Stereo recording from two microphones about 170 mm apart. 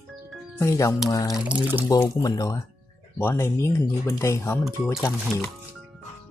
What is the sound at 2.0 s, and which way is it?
Speech, 20° left (ahead or behind).